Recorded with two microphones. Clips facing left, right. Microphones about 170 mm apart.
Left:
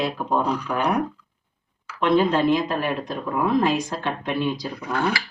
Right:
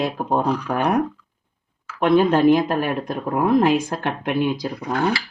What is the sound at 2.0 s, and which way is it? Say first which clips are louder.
Speech: right 4 dB; 55° right (ahead or behind).